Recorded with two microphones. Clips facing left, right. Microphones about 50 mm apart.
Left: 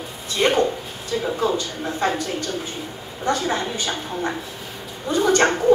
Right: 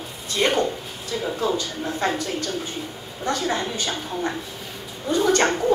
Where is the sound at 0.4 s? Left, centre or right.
Centre.